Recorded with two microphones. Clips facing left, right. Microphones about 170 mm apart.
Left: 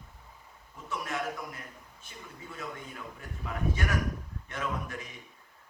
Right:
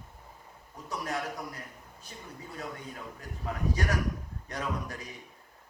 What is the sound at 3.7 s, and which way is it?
A man's voice, 35° right (ahead or behind).